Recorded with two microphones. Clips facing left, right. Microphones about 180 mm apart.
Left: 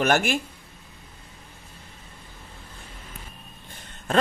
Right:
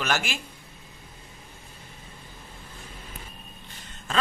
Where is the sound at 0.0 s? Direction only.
55° left (ahead or behind).